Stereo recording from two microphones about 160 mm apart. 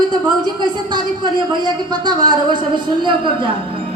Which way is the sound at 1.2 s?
25° right (ahead or behind).